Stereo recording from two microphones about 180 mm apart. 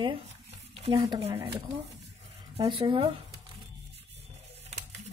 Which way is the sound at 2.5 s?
30° right (ahead or behind).